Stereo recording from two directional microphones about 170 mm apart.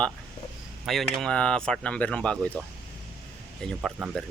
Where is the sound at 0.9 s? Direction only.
Centre (ahead or behind).